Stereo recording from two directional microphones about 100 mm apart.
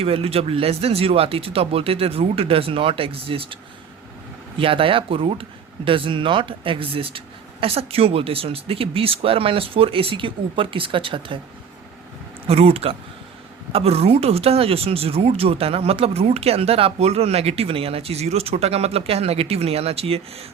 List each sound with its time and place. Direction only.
0.0 s speech: 75° right (ahead or behind)
7.6 s speech: 80° right; by 11.3 s 60° right (ahead or behind)
12.5 s speech: 85° right
13.7 s speech: 85° right